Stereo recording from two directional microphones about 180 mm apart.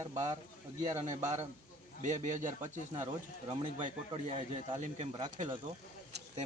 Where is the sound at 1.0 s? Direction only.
40° right (ahead or behind).